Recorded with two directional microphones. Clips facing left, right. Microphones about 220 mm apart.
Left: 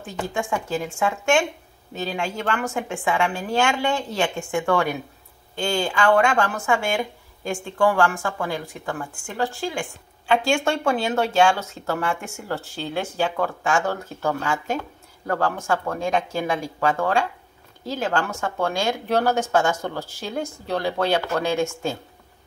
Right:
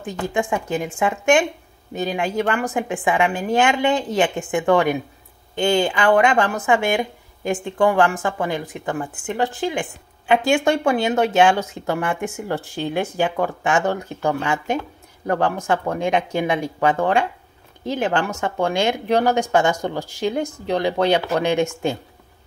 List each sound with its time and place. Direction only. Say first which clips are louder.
0.3 s a woman's voice: right 3 dB; 15° right (ahead or behind)